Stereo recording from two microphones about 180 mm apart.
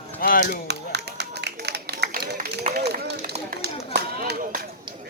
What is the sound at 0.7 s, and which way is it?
Run, 70° right (ahead or behind).